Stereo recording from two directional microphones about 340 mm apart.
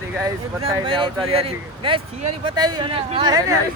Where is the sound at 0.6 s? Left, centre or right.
Centre.